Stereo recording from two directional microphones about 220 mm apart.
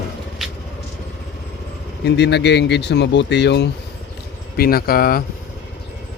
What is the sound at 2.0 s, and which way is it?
Speech, 50° left (ahead or behind).